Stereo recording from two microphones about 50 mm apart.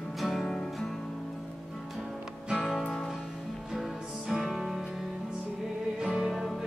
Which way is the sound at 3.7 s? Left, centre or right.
Centre.